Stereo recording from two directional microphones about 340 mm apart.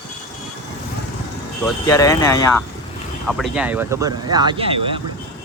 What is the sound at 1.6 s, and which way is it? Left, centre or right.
Speech, centre.